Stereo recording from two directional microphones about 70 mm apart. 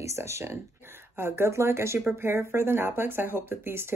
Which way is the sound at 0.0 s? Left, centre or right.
Right.